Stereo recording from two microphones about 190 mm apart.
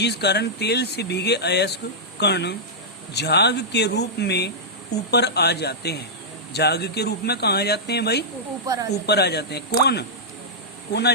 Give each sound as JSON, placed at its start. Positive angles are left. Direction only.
{"t": 0.0, "sound": "speech", "side_deg": 60}
{"t": 8.6, "sound": "speech", "side_deg": -20}
{"t": 9.0, "sound": "speech", "side_deg": 60}